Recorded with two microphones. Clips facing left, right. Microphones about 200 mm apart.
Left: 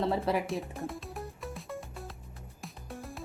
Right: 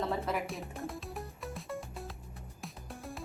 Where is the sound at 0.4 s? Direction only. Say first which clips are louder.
Left 4 dB; centre (ahead or behind).